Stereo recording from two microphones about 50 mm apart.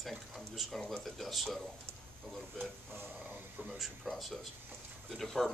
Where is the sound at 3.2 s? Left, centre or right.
Right.